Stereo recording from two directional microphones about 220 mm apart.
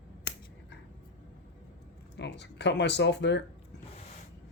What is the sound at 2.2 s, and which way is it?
Speech, 50° left (ahead or behind).